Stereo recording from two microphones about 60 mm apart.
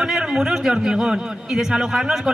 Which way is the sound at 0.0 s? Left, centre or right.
Centre.